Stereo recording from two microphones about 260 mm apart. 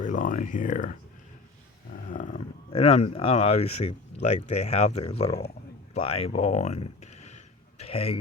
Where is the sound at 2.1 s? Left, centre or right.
Left.